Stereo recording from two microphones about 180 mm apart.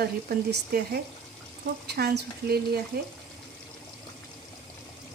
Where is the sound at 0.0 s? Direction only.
60° right (ahead or behind).